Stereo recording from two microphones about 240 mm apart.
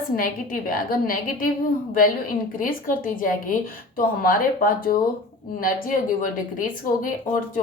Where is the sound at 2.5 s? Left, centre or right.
Left.